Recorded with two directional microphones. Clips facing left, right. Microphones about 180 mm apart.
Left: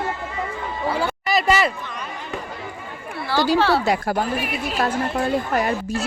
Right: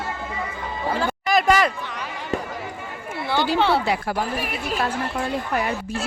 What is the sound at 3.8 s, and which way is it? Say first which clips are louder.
Speech: left 3 dB; 45° left (ahead or behind).